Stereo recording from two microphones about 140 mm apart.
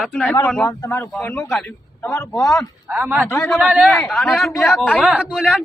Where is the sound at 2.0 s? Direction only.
20° left (ahead or behind).